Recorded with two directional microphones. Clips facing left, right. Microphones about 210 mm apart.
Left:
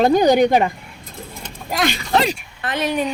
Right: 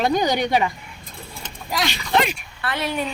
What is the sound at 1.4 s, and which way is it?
Keys jangling, 55° left (ahead or behind).